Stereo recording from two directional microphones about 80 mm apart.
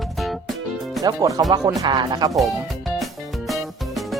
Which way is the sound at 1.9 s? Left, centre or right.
Right.